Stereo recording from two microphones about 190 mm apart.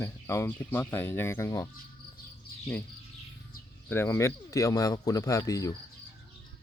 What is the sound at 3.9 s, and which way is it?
Speech, 10° left (ahead or behind).